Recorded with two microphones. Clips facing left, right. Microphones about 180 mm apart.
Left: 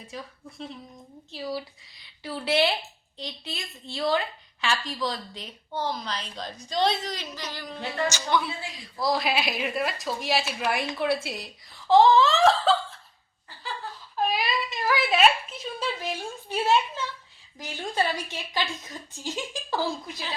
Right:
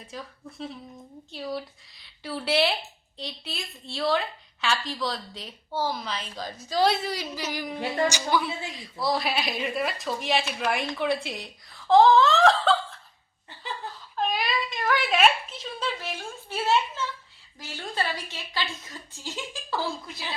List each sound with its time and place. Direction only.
0.0 s a woman's voice: centre (ahead or behind)
8.4 s a woman's voice: centre (ahead or behind)
14.2 s a sound: 5° left (ahead or behind)
17.6 s a woman's voice: 15° left (ahead or behind)